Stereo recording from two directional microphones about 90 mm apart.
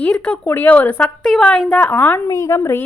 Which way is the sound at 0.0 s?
10° left (ahead or behind).